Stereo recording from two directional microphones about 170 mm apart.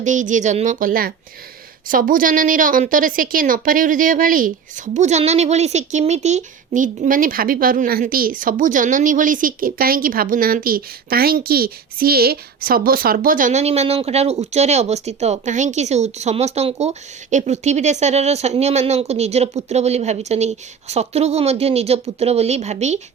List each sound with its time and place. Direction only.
0.0 s a woman's voice: 45° right (ahead or behind)
4.9 s speech: 40° right (ahead or behind)